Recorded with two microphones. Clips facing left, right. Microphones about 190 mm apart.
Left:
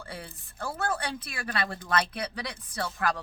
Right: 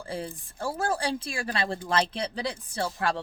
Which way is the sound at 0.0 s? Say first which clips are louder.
Right 7 dB; 30° right (ahead or behind).